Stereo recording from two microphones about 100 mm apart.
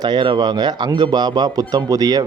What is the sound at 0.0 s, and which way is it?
A man's voice, 50° right (ahead or behind).